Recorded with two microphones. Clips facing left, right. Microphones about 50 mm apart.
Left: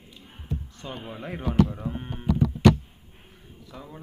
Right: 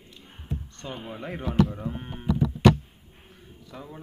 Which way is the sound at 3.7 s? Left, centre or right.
Centre.